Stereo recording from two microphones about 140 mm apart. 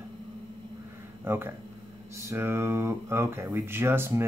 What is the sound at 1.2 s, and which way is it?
Speech, 15° right (ahead or behind).